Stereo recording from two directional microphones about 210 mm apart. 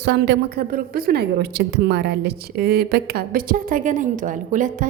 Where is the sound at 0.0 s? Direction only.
55° right (ahead or behind).